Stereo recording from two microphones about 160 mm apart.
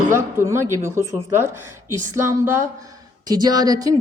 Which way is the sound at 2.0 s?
15° right (ahead or behind).